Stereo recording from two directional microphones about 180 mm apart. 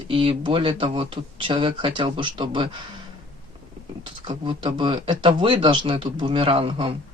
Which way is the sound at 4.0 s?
25° right (ahead or behind).